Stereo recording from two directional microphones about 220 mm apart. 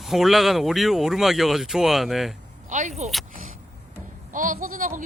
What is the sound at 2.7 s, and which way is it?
Speech, 35° right (ahead or behind).